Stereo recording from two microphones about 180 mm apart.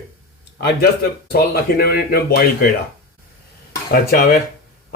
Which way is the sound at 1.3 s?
60° left (ahead or behind).